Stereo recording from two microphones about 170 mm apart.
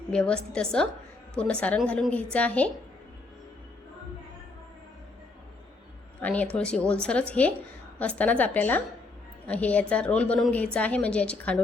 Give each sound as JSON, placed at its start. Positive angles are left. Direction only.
{"t": 0.1, "sound": "a woman's voice", "side_deg": 5}
{"t": 6.2, "sound": "a woman's voice", "side_deg": 10}